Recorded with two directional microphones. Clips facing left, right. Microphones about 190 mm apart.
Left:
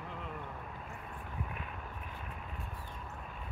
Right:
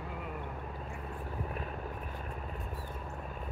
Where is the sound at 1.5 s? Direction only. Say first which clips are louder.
Right 5 dB; 40° right (ahead or behind).